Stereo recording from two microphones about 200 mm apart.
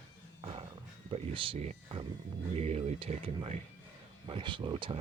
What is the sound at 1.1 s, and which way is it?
Speech, 25° right (ahead or behind).